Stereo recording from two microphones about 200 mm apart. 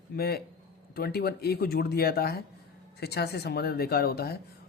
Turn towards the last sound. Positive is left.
turn(degrees=50)  # may be behind; listen again after turning